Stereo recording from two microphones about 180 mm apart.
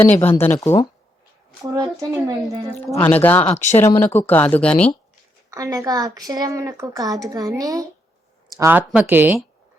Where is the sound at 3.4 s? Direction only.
35° left (ahead or behind).